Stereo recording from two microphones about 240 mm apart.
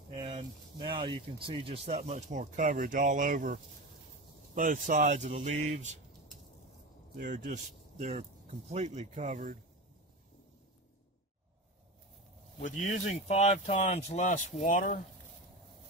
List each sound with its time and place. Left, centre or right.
0.2 s speech: centre
7.2 s speech: right
12.6 s speech: left